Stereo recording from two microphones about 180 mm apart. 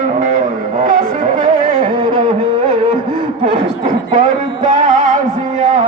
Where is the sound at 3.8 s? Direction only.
40° right (ahead or behind).